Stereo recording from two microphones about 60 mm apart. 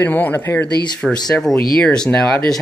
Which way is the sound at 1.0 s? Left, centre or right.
Centre.